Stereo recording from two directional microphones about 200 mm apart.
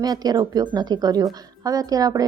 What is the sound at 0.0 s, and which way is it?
A woman's voice, 20° right (ahead or behind).